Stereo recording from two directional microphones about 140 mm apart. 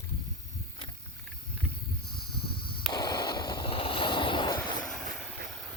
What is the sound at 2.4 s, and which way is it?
Snake, 90° left.